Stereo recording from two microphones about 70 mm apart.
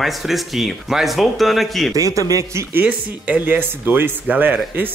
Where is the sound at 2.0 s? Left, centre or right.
Right.